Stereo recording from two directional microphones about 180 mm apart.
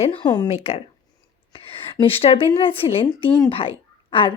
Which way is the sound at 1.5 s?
30° left (ahead or behind).